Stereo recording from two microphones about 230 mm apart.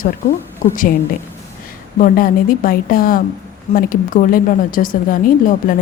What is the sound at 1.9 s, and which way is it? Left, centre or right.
A woman's voice, left.